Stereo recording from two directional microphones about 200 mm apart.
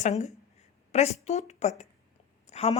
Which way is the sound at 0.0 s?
35° left (ahead or behind).